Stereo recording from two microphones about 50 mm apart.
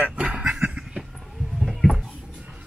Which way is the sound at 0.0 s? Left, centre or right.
Right.